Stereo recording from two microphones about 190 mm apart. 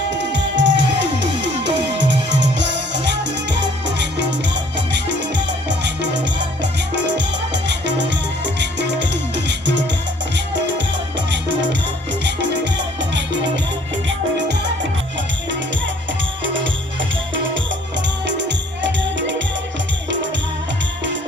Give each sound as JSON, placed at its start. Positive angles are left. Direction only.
{"t": 0.1, "sound": "music", "side_deg": -70}
{"t": 5.6, "sound": "music", "side_deg": -65}
{"t": 18.3, "sound": "music", "side_deg": -70}